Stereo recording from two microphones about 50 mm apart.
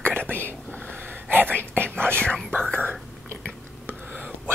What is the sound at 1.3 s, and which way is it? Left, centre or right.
Whispering, right.